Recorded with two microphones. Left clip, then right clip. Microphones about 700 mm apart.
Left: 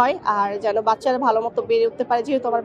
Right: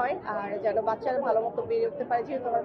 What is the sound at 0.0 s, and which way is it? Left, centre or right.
A man's voice, left.